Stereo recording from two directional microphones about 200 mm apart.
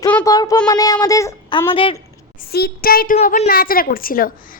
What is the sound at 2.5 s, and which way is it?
Speech, 50° left (ahead or behind).